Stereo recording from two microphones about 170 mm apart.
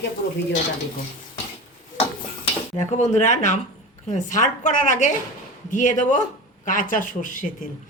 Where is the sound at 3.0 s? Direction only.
40° left (ahead or behind).